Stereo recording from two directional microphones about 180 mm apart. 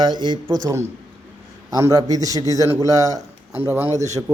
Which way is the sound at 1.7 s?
20° right (ahead or behind).